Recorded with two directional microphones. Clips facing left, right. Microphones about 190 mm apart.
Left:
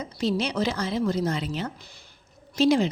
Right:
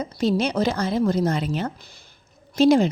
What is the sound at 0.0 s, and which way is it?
A woman's voice, 45° right (ahead or behind).